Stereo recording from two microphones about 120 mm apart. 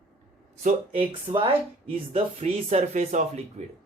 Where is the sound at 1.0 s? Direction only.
50° right (ahead or behind); by 3.3 s 75° right (ahead or behind).